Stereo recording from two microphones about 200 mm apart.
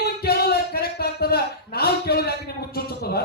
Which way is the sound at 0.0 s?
50° left (ahead or behind).